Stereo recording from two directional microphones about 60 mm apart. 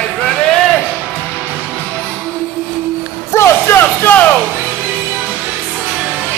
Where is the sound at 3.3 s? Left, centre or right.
Left.